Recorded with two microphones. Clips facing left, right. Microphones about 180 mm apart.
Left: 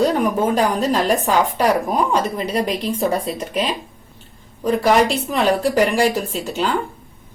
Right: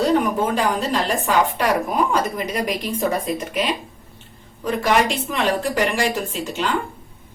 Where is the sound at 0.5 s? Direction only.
40° left (ahead or behind).